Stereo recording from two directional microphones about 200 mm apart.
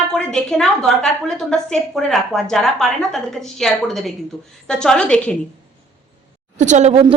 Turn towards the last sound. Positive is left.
turn(degrees=-30)  # may be behind; listen again after turning